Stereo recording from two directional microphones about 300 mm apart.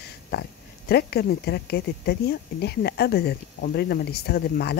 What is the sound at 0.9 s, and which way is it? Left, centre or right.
Speech, left.